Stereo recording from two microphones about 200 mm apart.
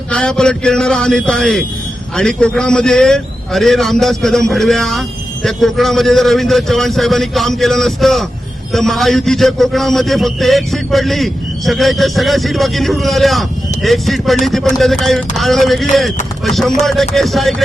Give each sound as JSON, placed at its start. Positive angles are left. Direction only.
{"t": 0.1, "sound": "a man's voice", "side_deg": 5}